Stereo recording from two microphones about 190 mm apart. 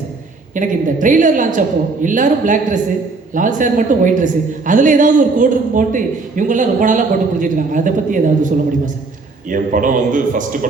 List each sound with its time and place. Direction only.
0.5 s a woman's voice: 45° right (ahead or behind)